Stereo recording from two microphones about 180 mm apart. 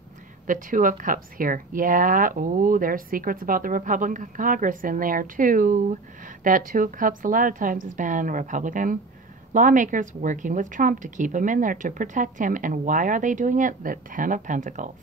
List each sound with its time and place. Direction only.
0.5 s speech: 45° right (ahead or behind)